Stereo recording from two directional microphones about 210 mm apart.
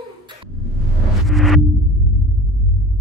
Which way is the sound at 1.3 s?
Centre (ahead or behind).